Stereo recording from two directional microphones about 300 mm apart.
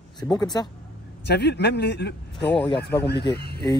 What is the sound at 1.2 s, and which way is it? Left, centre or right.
Speech, left.